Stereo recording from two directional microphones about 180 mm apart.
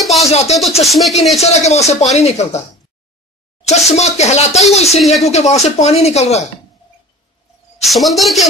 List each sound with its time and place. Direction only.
0.0 s a sound: centre (ahead or behind)
0.3 s speech: 35° left (ahead or behind)
0.8 s a woman's voice: centre (ahead or behind)
1.4 s speech: 40° left (ahead or behind)
3.6 s speech: 40° left (ahead or behind)
7.8 s a woman's voice: centre (ahead or behind)